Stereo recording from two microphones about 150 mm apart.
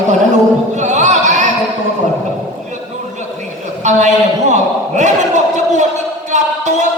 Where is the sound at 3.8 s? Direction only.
50° right (ahead or behind).